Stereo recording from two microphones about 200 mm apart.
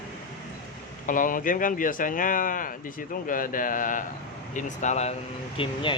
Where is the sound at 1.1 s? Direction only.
40° left (ahead or behind).